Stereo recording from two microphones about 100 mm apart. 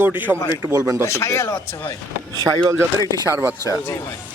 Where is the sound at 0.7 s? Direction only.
35° right (ahead or behind).